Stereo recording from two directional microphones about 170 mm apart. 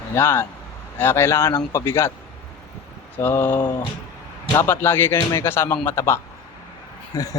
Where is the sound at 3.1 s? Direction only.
10° left (ahead or behind).